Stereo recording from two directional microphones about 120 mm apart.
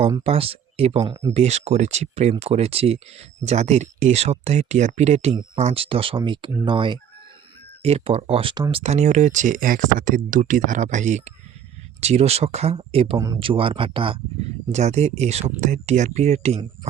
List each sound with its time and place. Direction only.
0.3 s speech: 55° right (ahead or behind)
1.0 s speech: 35° right (ahead or behind)
1.3 s speech: 65° right (ahead or behind); by 7.0 s 40° right (ahead or behind)
7.8 s speech: 55° right (ahead or behind)
8.7 s speech: 65° right (ahead or behind); by 11.3 s 85° right
11.9 s speech: 60° right (ahead or behind)
13.1 s speech: 30° right (ahead or behind)
13.4 s speech: 50° right (ahead or behind)
14.7 s speech: 70° right (ahead or behind)